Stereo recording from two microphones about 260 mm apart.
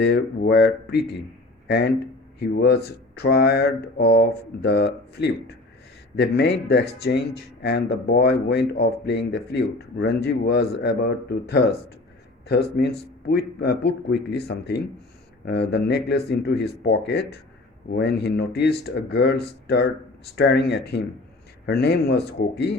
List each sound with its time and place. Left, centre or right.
0.0 s speech: left